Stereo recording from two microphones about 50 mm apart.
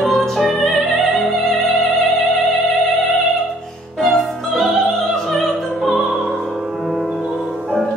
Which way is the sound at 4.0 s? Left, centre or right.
Centre.